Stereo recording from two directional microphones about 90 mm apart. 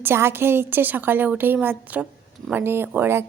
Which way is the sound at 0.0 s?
25° right (ahead or behind).